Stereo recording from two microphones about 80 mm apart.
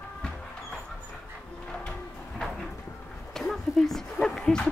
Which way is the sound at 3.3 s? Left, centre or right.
Centre.